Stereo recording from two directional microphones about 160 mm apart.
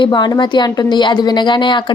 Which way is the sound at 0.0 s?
30° left (ahead or behind).